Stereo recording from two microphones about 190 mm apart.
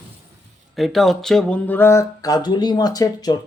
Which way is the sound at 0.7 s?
Centre (ahead or behind).